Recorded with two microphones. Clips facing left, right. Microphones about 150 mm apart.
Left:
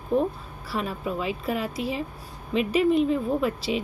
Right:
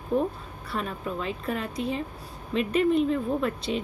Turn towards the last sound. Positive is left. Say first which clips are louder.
# left 2 dB
turn(degrees=5)  # may be behind; listen again after turning